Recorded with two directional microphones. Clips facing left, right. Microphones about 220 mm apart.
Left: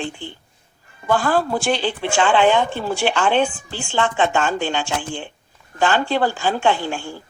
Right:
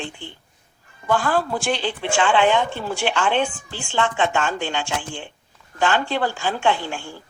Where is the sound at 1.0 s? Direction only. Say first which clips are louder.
Left 2 dB; 35° left (ahead or behind).